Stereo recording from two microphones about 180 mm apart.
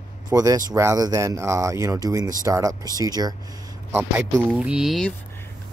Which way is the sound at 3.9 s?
10° right (ahead or behind).